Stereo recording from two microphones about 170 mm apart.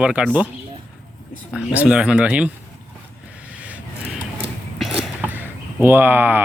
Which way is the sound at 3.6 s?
5° right (ahead or behind).